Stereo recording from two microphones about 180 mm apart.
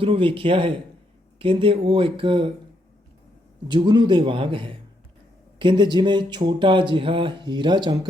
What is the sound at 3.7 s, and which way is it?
Speech, 25° right (ahead or behind).